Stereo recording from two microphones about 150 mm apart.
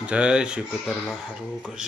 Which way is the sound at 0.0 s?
10° right (ahead or behind).